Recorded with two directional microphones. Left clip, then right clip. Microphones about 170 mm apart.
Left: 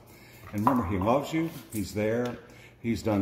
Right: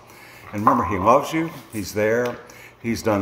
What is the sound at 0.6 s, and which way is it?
Speech, 5° left (ahead or behind).